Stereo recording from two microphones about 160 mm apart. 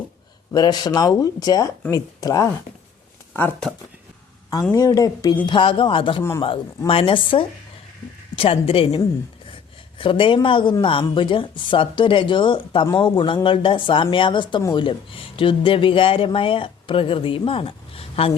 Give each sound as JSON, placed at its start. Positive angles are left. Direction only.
{"t": 0.5, "sound": "speech", "side_deg": 25}
{"t": 4.7, "sound": "a woman's voice", "side_deg": 20}
{"t": 10.0, "sound": "a woman's voice", "side_deg": 35}